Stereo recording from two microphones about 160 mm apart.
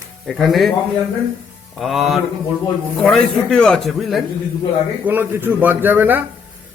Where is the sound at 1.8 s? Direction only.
Centre (ahead or behind).